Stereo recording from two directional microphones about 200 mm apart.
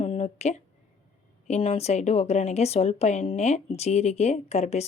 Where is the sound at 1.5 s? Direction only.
30° left (ahead or behind).